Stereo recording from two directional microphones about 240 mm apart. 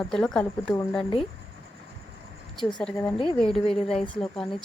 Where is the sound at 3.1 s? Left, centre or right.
Left.